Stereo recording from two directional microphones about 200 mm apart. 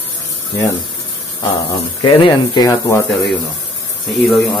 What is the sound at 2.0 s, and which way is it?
Speech, 25° left (ahead or behind).